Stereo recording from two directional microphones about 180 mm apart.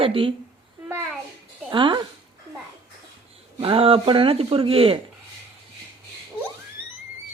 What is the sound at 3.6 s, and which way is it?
Speech, 30° right (ahead or behind).